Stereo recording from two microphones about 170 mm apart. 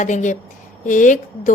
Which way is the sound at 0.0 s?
45° left (ahead or behind).